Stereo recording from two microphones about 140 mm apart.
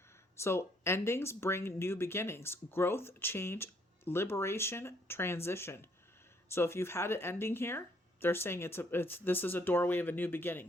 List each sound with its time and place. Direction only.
0.4 s speech: 20° left (ahead or behind)